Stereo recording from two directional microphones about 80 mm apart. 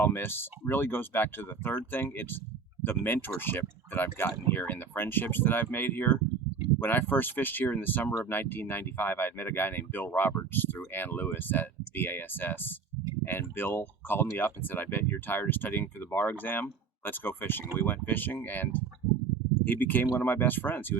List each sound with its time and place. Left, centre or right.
0.0 s speech: left